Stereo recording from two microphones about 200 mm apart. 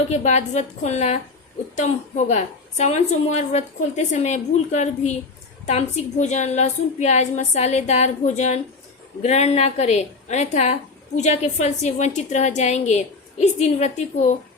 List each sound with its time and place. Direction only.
0.1 s a woman's voice: 35° left (ahead or behind)